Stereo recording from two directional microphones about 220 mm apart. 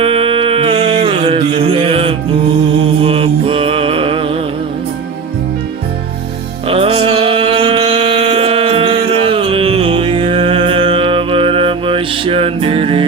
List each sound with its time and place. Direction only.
0.0 s a sound: 25° right (ahead or behind)
3.0 s mantra: 25° right (ahead or behind)
6.7 s music: 25° right (ahead or behind)